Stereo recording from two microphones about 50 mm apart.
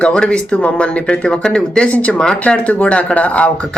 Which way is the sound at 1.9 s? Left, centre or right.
Left.